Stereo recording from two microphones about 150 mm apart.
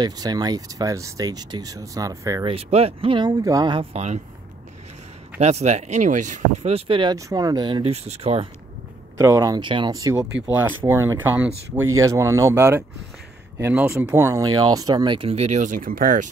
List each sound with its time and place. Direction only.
0.0 s speech: 25° right (ahead or behind)
2.4 s speech: 40° right (ahead or behind); by 3.8 s 25° right (ahead or behind)
3.9 s speech: 50° right (ahead or behind)
5.4 s speech: 50° right (ahead or behind)
9.2 s speech: 20° right (ahead or behind)
15.1 s speech: 45° right (ahead or behind); by 16.3 s 65° right (ahead or behind)